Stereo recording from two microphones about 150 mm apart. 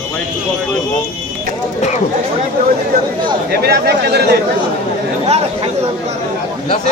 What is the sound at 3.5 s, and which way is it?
Speech, 90° right.